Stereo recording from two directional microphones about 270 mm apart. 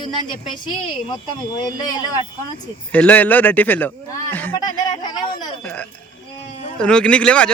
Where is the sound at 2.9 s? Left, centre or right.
Centre.